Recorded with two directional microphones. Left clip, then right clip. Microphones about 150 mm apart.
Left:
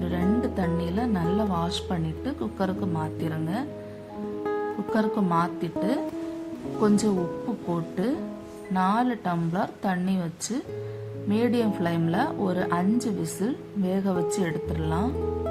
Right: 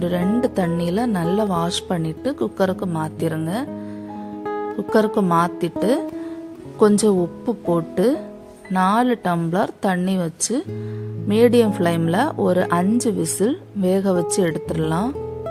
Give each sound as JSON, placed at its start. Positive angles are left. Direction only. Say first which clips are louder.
{"t": 0.4, "sound": "speech", "louder": "right 7 dB", "side_deg": -60}
{"t": 4.9, "sound": "speech", "louder": "right 9 dB", "side_deg": -55}